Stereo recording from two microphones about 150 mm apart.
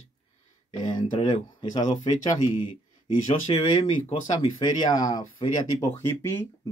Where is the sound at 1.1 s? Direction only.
35° left (ahead or behind).